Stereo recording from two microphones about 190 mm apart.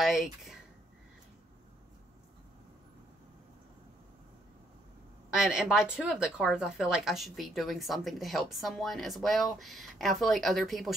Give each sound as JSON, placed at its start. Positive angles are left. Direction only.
{"t": 0.0, "sound": "speech", "side_deg": 0}
{"t": 5.3, "sound": "speech", "side_deg": -5}